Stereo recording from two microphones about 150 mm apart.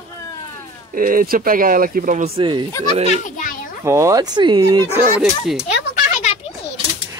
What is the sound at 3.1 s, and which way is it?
Speech, 55° left (ahead or behind).